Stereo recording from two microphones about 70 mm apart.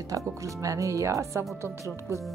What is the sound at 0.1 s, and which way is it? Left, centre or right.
Speech, right.